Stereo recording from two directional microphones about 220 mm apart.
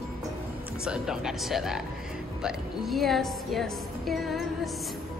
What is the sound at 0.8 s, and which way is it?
A woman's voice, 5° right (ahead or behind).